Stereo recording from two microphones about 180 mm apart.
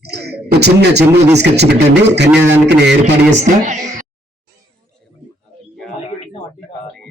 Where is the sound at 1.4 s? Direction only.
70° right (ahead or behind).